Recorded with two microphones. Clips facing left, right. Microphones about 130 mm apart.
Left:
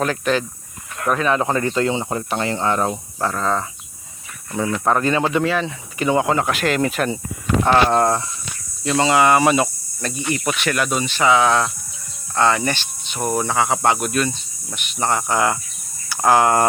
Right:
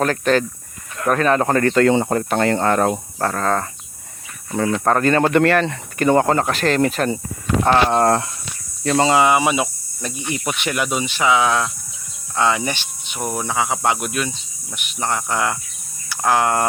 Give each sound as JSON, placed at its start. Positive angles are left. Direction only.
{"t": 0.0, "sound": "speech", "side_deg": -45}
{"t": 1.7, "sound": "speech", "side_deg": -60}
{"t": 4.9, "sound": "speech", "side_deg": -45}
{"t": 5.4, "sound": "speech", "side_deg": -70}
{"t": 7.6, "sound": "speech", "side_deg": -25}
{"t": 8.9, "sound": "speech", "side_deg": -40}
{"t": 9.1, "sound": "speech", "side_deg": -15}
{"t": 13.2, "sound": "speech", "side_deg": 0}